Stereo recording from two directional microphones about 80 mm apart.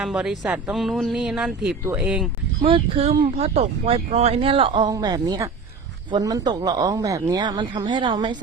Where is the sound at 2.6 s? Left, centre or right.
Right.